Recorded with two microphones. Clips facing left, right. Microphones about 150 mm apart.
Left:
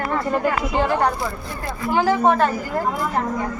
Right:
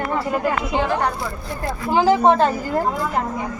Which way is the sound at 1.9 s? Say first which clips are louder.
Right 2 dB; 30° right (ahead or behind).